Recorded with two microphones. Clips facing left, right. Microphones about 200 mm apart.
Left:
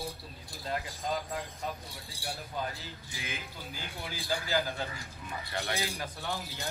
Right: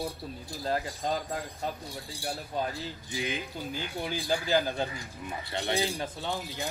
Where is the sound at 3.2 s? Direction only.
15° right (ahead or behind).